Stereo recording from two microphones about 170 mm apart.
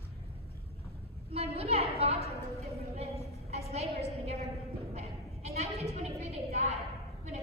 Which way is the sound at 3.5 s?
40° right (ahead or behind).